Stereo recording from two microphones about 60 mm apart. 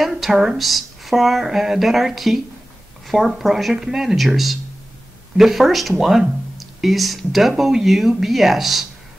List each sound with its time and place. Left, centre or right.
0.0 s speech: centre